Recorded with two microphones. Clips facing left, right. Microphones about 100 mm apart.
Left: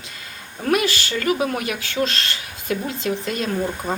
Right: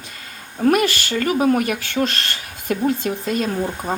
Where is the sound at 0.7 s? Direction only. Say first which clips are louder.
Right 3 dB; 50° right (ahead or behind).